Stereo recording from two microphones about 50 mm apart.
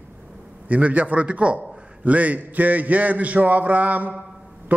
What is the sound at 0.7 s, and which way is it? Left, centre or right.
Speech, right.